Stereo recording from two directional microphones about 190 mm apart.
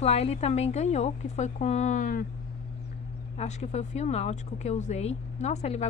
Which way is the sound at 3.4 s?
35° left (ahead or behind).